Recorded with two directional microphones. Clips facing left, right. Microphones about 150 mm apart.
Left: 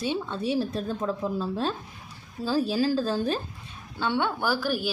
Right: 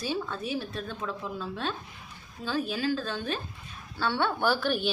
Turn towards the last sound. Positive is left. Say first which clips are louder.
# even
turn(degrees=5)  # may be behind; listen again after turning